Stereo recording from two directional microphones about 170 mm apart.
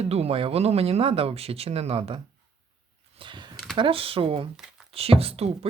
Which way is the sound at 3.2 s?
25° right (ahead or behind).